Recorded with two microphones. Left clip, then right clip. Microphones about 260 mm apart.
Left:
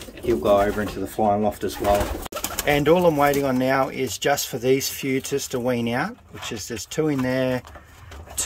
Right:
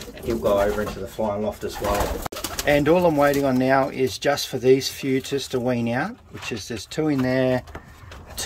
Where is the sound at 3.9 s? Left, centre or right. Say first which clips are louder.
Even; left.